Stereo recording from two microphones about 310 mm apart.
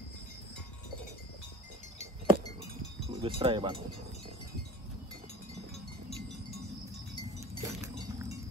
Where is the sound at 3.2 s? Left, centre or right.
Centre.